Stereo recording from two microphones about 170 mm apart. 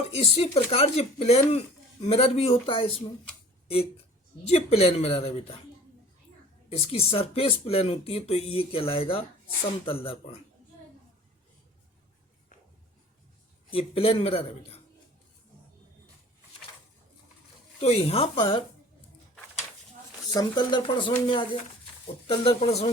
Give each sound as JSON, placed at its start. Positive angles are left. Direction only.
{"t": 0.1, "sound": "speech", "side_deg": 35}
{"t": 4.4, "sound": "speech", "side_deg": 35}
{"t": 6.7, "sound": "speech", "side_deg": 35}
{"t": 13.7, "sound": "speech", "side_deg": 35}
{"t": 17.7, "sound": "speech", "side_deg": 35}
{"t": 20.3, "sound": "speech", "side_deg": 25}